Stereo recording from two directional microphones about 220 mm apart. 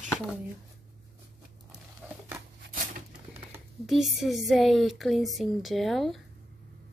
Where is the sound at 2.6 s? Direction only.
40° right (ahead or behind).